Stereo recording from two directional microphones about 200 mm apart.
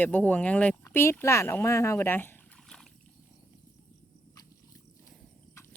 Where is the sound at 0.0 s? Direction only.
10° left (ahead or behind).